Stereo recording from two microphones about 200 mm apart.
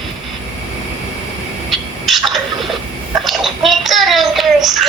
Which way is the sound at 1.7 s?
Centre (ahead or behind).